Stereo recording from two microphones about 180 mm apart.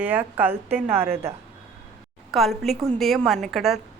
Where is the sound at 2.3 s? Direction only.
Centre (ahead or behind).